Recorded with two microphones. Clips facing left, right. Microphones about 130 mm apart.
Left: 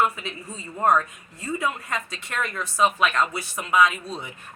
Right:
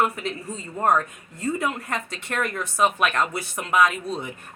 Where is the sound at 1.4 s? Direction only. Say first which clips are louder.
Right 2 dB; 55° right (ahead or behind).